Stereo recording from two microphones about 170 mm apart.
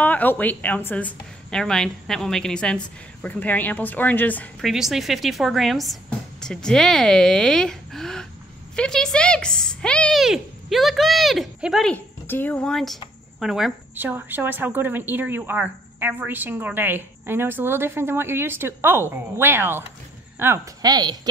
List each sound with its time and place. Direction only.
0.0 s a woman's voice: 10° left (ahead or behind); by 21.2 s 25° right (ahead or behind)